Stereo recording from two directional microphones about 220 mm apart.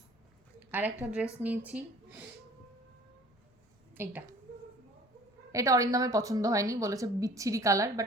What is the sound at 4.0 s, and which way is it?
Speech, 10° right (ahead or behind).